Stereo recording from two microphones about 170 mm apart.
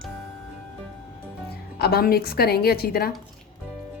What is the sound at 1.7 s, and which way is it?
A woman's voice, 65° left (ahead or behind).